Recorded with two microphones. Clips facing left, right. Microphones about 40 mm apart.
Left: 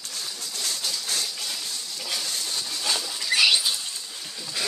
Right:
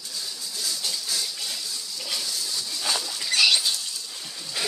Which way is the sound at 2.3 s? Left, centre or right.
Left.